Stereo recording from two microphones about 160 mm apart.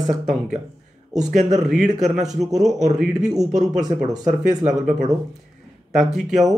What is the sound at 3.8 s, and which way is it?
Speech, 25° right (ahead or behind).